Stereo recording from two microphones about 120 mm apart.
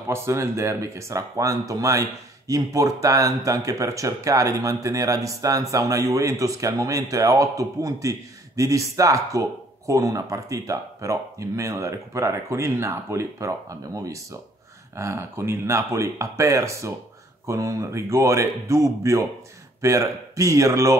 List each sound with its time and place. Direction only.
0.1 s speech: 25° right (ahead or behind)